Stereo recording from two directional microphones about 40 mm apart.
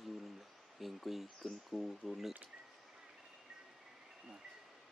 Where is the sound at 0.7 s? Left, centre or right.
Centre.